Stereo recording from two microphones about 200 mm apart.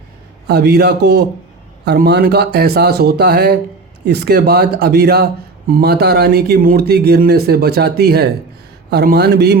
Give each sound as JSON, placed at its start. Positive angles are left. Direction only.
{"t": 0.4, "sound": "a man's voice", "side_deg": -55}